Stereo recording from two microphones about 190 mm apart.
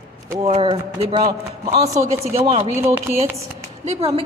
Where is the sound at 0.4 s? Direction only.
35° right (ahead or behind).